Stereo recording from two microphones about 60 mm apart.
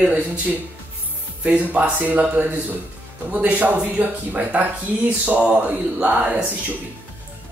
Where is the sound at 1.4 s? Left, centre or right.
Right.